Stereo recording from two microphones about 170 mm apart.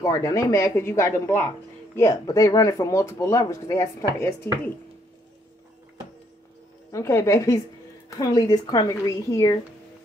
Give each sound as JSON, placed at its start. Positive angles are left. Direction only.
{"t": 0.0, "sound": "speech", "side_deg": 20}
{"t": 6.9, "sound": "speech", "side_deg": 15}